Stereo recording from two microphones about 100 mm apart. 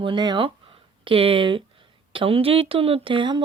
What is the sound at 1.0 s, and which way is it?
Speech, 65° right (ahead or behind).